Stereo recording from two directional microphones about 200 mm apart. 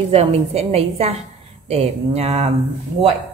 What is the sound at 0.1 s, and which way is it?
A woman's voice, 30° right (ahead or behind).